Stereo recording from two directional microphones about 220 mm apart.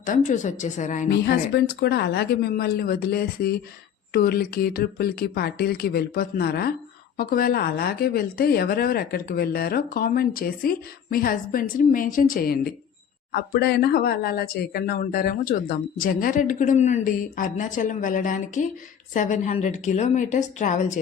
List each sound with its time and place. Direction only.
0.0 s speech: 35° left (ahead or behind)
1.1 s a woman's voice: 45° left (ahead or behind)